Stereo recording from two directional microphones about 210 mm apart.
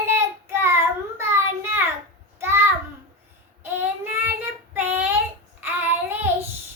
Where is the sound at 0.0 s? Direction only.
10° right (ahead or behind).